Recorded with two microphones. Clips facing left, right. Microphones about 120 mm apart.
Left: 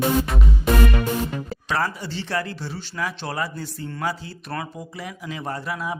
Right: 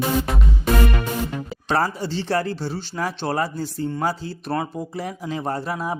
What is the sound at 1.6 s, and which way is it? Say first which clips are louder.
Speech: right 4 dB; 35° right (ahead or behind).